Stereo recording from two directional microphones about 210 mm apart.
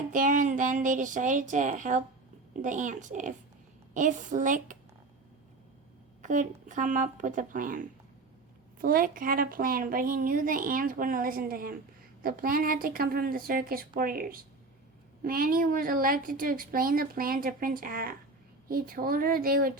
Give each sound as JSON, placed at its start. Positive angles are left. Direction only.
{"t": 0.1, "sound": "a woman's voice", "side_deg": -40}
{"t": 6.2, "sound": "a woman's voice", "side_deg": -35}